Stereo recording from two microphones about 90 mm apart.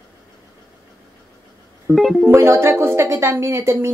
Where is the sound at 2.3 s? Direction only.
30° right (ahead or behind).